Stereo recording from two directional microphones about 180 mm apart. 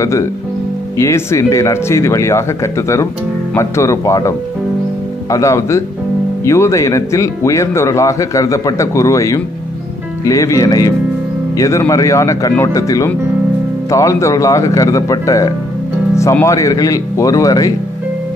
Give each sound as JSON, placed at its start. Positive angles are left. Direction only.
{"t": 0.0, "sound": "speech", "side_deg": 15}